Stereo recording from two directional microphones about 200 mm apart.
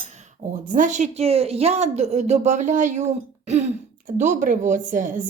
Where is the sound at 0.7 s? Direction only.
40° right (ahead or behind).